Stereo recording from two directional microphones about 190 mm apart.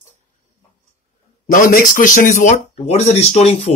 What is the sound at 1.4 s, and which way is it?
Speech, 45° left (ahead or behind).